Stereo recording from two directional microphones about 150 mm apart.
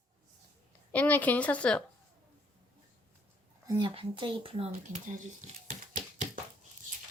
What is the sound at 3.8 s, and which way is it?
Speech, 35° right (ahead or behind).